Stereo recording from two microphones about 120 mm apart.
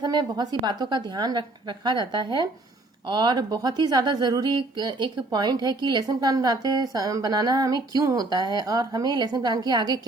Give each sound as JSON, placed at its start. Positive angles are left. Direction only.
{"t": 0.0, "sound": "a woman's voice", "side_deg": -40}